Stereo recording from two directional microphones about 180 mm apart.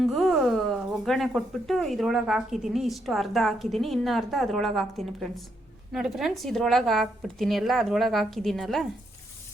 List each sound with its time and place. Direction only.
0.0 s speech: centre (ahead or behind)